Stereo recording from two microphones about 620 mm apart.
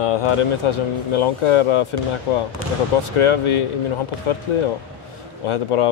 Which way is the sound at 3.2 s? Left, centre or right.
Left.